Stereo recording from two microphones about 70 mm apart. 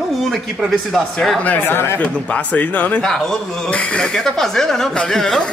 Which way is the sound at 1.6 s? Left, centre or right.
Left.